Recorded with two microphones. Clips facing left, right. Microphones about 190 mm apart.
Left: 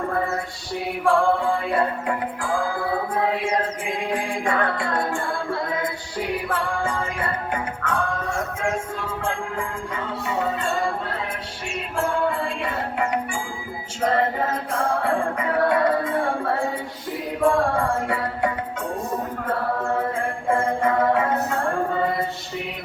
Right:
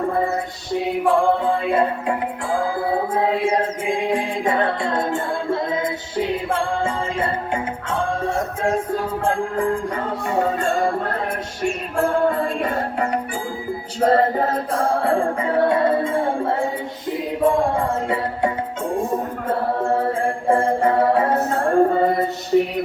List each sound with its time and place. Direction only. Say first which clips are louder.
0.1 s music: right 4 dB; 20° right (ahead or behind); by 22.6 s 40° right (ahead or behind)